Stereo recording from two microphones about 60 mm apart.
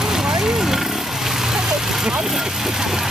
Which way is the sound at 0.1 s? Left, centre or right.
Centre.